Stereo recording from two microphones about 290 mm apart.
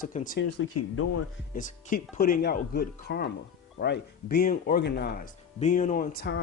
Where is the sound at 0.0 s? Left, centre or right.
Left.